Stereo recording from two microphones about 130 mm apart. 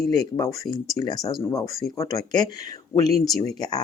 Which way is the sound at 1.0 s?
30° left (ahead or behind).